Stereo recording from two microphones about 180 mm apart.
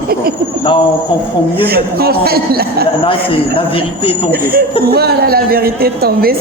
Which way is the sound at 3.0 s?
30° left (ahead or behind).